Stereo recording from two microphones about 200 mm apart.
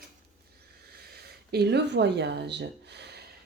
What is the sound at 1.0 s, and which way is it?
Speech, 55° right (ahead or behind).